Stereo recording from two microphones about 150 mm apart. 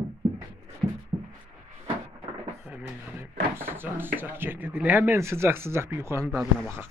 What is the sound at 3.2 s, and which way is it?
Drawer open or close, 15° right (ahead or behind).